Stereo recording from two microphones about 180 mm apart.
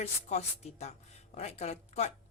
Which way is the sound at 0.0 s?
40° left (ahead or behind).